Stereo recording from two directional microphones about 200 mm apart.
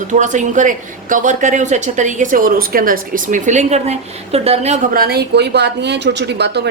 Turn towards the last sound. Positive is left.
turn(degrees=-55)  # may be behind; listen again after turning